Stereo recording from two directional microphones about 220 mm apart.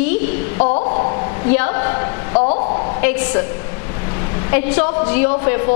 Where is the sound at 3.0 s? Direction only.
10° left (ahead or behind).